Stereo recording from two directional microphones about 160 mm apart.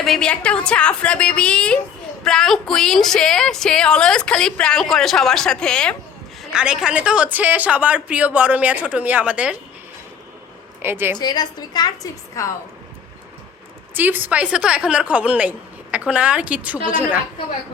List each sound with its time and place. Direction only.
0.0 s a woman's voice: 5° left (ahead or behind)
6.4 s a woman's voice: 5° right (ahead or behind)
10.8 s a woman's voice: 15° right (ahead or behind)
11.2 s a woman's voice: 25° left (ahead or behind)
13.9 s a woman's voice: 10° right (ahead or behind)